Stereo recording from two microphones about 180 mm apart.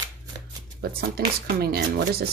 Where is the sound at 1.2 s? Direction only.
60° right (ahead or behind).